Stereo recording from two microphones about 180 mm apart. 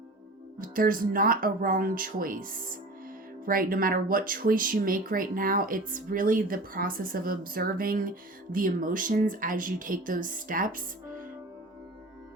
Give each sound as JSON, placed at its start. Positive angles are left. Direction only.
{"t": 0.6, "sound": "speech", "side_deg": -50}